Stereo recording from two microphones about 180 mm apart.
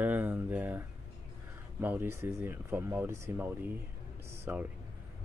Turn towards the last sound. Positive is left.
turn(degrees=-15)  # may be behind; listen again after turning